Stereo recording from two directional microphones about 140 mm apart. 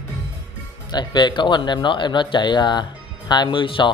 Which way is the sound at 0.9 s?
30° left (ahead or behind).